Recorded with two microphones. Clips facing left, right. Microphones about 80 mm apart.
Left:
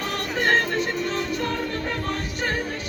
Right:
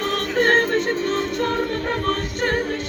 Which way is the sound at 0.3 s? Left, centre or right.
Right.